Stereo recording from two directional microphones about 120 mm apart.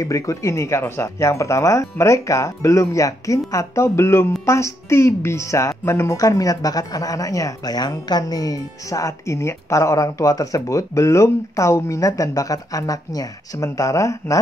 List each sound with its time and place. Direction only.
0.0 s a woman's voice: 25° left (ahead or behind)